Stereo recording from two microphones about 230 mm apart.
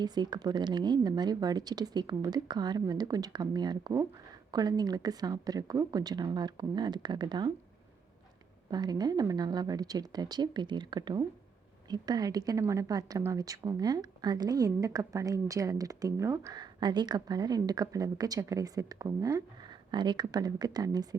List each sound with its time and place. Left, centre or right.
0.0 s a woman's voice: centre
8.7 s a woman's voice: centre